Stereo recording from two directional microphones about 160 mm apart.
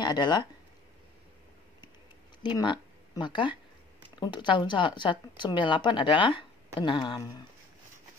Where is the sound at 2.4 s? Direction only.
30° left (ahead or behind).